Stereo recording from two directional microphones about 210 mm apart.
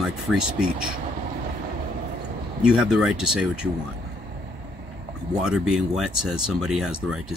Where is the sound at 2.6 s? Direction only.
5° right (ahead or behind).